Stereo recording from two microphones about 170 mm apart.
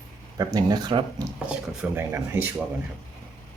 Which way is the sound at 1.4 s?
10° right (ahead or behind).